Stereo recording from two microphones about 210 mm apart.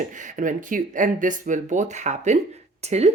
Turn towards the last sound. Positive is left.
turn(degrees=-30)  # may be behind; listen again after turning